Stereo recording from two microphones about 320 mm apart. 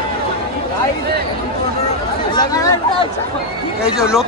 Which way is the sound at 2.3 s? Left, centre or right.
Centre.